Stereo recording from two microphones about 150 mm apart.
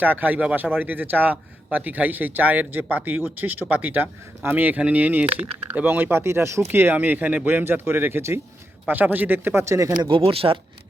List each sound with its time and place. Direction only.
0.0 s a man's voice: 10° right (ahead or behind)
10.0 s speech: 35° right (ahead or behind)